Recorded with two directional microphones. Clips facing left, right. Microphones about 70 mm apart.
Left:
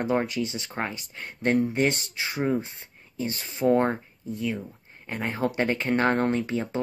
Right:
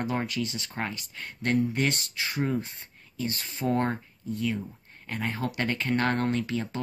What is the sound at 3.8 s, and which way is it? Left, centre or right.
Speech, centre.